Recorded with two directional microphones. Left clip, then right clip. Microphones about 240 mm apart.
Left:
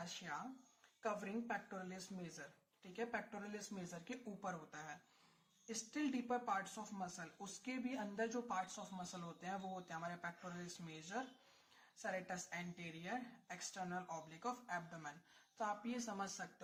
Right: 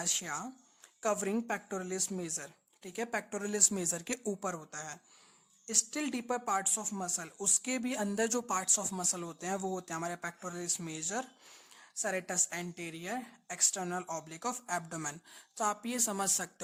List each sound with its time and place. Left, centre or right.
0.0 s speech: right